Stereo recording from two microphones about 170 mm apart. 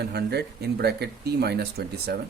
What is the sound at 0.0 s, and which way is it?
Speech, 70° right (ahead or behind).